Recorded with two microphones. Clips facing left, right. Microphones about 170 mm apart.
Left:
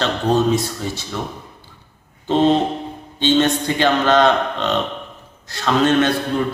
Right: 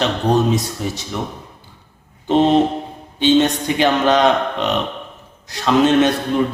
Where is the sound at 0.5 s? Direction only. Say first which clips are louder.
Even; 15° right (ahead or behind).